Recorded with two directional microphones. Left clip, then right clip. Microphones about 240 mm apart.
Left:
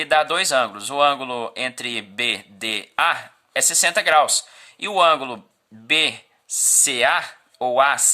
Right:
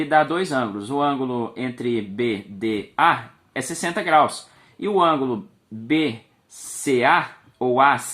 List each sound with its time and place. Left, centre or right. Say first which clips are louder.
0.0 s speech: left 1 dB; left
6.8 s speech: right 4 dB; left